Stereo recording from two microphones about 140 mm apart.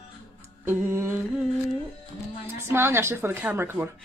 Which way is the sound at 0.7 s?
15° right (ahead or behind).